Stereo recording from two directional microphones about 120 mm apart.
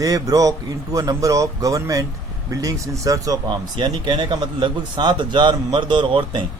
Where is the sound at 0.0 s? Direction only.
30° right (ahead or behind).